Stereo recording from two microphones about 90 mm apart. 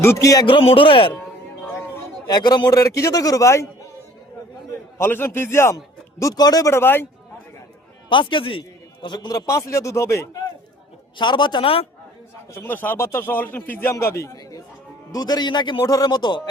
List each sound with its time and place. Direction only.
0.0 s a man's voice: 35° left (ahead or behind)
0.4 s speech: 70° left (ahead or behind)
2.2 s a man's voice: 50° left (ahead or behind); by 3.7 s 35° left (ahead or behind)
4.9 s speech: 25° left (ahead or behind)
5.7 s a man's voice: 40° left (ahead or behind)
6.7 s speech: 25° left (ahead or behind)
8.1 s a man's voice: 65° left (ahead or behind)
9.5 s a man's voice: 35° left (ahead or behind)
11.2 s a man's voice: 55° left (ahead or behind); by 11.9 s 90° left
12.5 s a man's voice: 20° left (ahead or behind)
15.1 s a man's voice: 50° left (ahead or behind)
15.8 s a man's voice: 40° left (ahead or behind)